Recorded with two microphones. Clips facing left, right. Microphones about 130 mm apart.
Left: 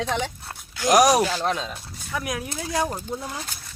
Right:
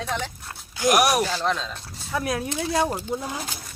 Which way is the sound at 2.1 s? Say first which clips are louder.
Right 3 dB; 30° right (ahead or behind).